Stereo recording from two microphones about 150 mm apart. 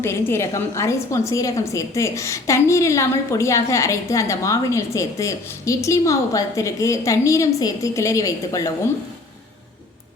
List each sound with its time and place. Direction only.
0.0 s a woman's voice: 15° left (ahead or behind)